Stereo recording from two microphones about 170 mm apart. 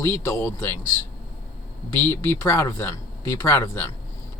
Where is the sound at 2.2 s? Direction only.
15° left (ahead or behind).